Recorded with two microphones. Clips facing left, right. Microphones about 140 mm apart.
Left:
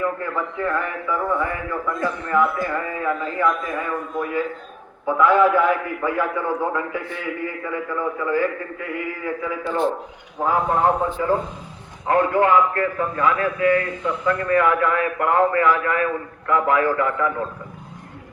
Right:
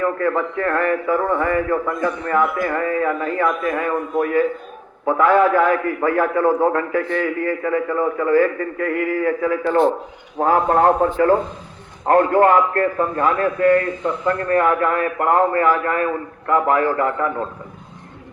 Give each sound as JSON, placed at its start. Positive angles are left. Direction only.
{"t": 0.0, "sound": "a man's voice", "side_deg": -65}
{"t": 5.0, "sound": "a man's voice", "side_deg": -50}